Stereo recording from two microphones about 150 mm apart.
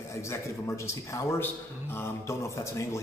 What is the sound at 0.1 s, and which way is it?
A man's voice, 20° left (ahead or behind).